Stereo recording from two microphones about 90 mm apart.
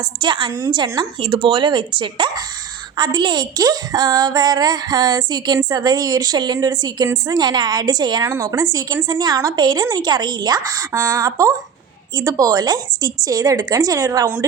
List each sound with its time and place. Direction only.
0.2 s a woman's voice: 65° right (ahead or behind)
8.2 s speech: 30° right (ahead or behind)
9.0 s a woman's voice: 50° right (ahead or behind)